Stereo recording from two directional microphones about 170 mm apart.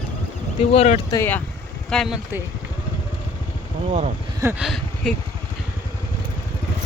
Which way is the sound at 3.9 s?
40° right (ahead or behind).